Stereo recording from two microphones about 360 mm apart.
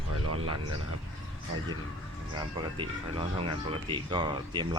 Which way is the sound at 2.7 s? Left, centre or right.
Centre.